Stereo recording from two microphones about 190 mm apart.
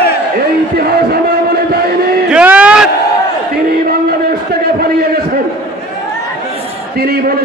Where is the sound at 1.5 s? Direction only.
55° right (ahead or behind).